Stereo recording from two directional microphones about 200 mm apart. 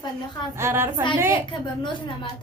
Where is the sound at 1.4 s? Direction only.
25° left (ahead or behind).